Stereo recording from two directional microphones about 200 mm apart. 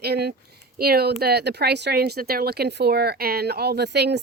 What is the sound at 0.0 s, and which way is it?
Speech, 55° right (ahead or behind).